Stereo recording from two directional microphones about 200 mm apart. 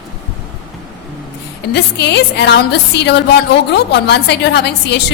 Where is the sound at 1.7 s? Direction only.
60° left (ahead or behind).